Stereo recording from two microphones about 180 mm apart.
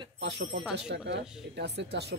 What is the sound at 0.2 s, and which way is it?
Speech, 70° right (ahead or behind).